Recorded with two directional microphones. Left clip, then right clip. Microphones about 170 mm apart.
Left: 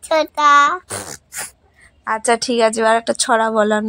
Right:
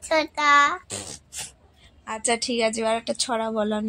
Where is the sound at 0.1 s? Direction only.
40° left (ahead or behind).